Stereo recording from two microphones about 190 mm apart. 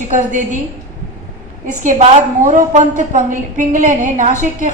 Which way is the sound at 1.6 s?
40° right (ahead or behind).